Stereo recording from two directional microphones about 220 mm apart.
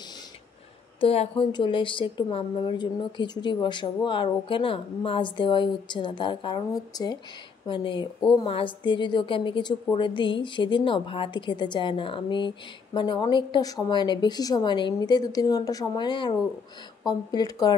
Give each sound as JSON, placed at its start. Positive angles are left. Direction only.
{"t": 1.0, "sound": "a woman's voice", "side_deg": 25}